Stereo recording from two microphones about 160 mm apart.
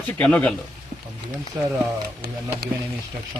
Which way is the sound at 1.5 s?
25° right (ahead or behind).